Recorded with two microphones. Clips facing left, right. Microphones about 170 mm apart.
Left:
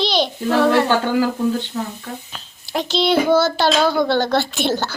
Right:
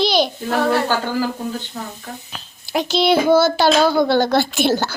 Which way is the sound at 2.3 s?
5° right (ahead or behind).